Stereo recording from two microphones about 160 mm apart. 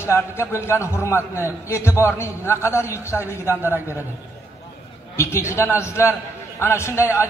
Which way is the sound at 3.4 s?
15° right (ahead or behind).